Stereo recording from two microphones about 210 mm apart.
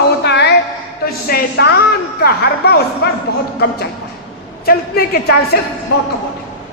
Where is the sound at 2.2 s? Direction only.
50° left (ahead or behind).